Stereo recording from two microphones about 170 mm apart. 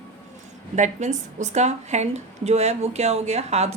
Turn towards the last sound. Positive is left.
turn(degrees=-40)  # may be behind; listen again after turning